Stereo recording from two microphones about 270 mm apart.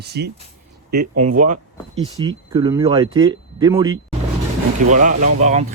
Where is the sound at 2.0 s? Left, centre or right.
Centre.